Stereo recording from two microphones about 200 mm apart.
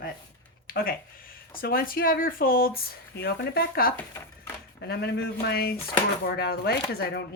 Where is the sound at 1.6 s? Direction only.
45° left (ahead or behind).